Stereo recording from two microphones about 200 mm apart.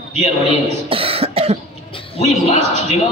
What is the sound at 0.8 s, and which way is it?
Cough, 30° right (ahead or behind).